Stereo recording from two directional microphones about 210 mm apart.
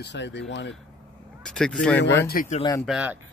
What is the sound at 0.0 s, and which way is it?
Speech, 55° left (ahead or behind).